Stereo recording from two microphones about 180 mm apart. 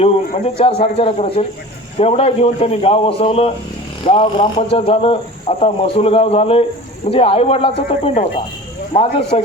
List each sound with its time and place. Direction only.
0.4 s speech: 35° left (ahead or behind)